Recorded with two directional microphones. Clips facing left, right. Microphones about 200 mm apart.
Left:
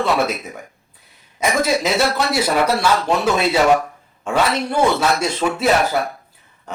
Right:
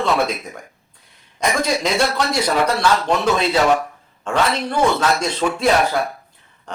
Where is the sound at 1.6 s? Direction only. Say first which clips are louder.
Left 2 dB; 5° left (ahead or behind).